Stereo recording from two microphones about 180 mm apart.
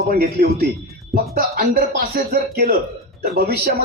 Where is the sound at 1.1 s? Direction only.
55° right (ahead or behind).